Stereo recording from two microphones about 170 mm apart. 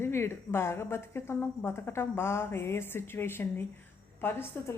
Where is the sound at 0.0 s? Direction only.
15° left (ahead or behind).